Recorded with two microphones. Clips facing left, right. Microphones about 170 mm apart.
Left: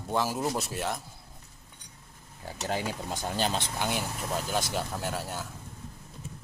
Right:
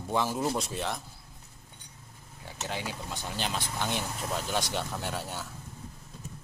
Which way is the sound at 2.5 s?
40° left (ahead or behind).